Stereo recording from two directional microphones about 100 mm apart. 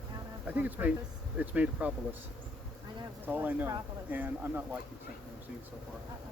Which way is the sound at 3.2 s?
20° right (ahead or behind).